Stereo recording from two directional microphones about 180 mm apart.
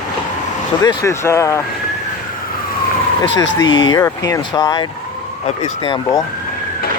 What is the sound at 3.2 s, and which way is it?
Speech, 85° left.